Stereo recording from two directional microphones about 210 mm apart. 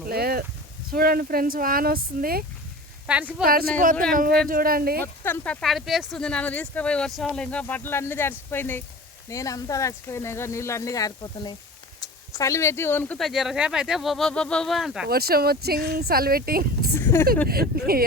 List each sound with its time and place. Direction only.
0.1 s a sound: 45° right (ahead or behind)
0.9 s speech: 45° right (ahead or behind)
3.1 s speech: 5° right (ahead or behind)
3.4 s speech: 45° right (ahead or behind)
5.2 s speech: 10° left (ahead or behind)
15.0 s speech: 50° right (ahead or behind)
16.9 s a sound: 10° left (ahead or behind)
17.5 s speech: 45° right (ahead or behind)